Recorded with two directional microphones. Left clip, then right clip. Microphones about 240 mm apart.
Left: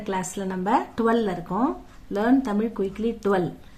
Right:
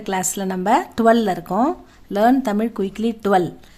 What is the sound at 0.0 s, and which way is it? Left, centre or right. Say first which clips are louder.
A woman's voice: right 5 dB; right.